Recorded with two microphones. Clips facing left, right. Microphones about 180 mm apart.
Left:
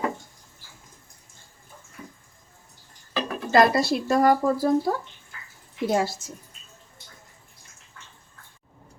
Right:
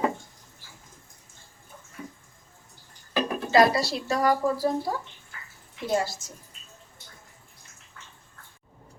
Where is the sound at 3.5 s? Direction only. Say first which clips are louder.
Left 2 dB; 50° left (ahead or behind).